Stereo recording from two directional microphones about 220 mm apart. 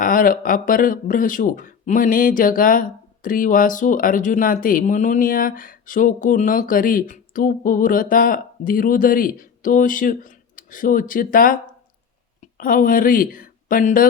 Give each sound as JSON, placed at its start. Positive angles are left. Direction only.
{"t": 0.0, "sound": "speech", "side_deg": 40}
{"t": 12.5, "sound": "speech", "side_deg": 40}